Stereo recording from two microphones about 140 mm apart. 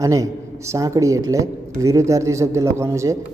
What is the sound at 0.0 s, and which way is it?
A man's voice, 25° right (ahead or behind).